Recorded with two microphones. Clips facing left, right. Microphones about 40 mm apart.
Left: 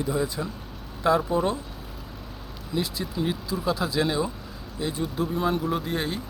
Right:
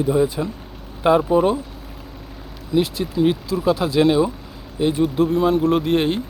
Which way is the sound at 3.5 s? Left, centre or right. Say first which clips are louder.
Right 4 dB; right.